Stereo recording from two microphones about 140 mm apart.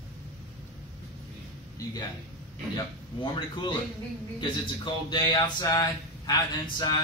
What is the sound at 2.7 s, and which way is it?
A man's voice, 35° left (ahead or behind).